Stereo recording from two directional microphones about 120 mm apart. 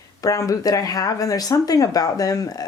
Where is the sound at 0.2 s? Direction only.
30° left (ahead or behind).